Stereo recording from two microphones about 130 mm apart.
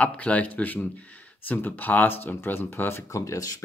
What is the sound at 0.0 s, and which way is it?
Speech, 10° left (ahead or behind).